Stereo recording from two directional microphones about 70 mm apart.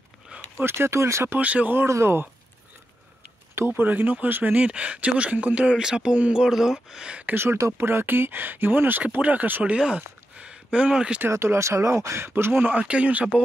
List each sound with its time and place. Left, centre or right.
0.6 s speech: right
1.4 s speech: right
1.8 s speech: right
3.5 s speech: right
7.7 s speech: right; by 11.2 s centre
11.2 s speech: right
12.7 s speech: centre